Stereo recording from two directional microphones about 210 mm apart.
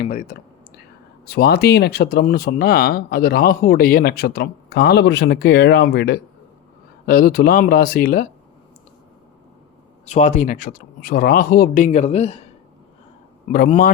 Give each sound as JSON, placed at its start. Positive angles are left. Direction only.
{"t": 0.0, "sound": "speech", "side_deg": 40}
{"t": 1.2, "sound": "speech", "side_deg": 50}
{"t": 10.1, "sound": "speech", "side_deg": 35}
{"t": 13.5, "sound": "speech", "side_deg": 40}